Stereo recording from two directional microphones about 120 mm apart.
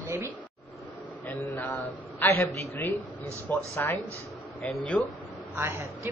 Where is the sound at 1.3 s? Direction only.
20° left (ahead or behind).